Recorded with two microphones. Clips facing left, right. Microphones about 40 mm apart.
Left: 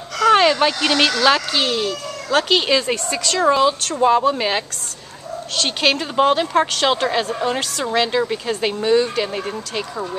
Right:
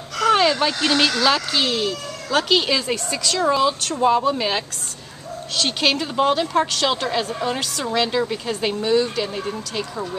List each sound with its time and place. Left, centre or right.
0.3 s a sound: left
0.7 s speech: left
1.2 s speech: centre